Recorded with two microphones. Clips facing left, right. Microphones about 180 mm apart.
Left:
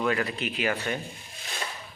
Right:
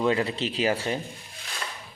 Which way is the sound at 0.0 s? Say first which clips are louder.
Right 3 dB; 25° right (ahead or behind).